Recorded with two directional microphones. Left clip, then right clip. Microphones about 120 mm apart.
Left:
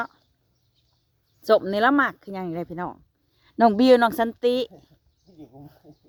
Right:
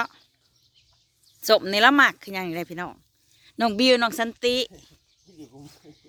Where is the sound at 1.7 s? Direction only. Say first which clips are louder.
Right 3 dB; centre (ahead or behind).